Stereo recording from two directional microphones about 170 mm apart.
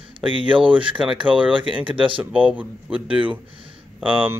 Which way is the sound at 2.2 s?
10° right (ahead or behind).